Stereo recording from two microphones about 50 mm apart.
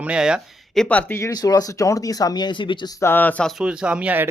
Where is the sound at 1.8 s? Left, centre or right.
Left.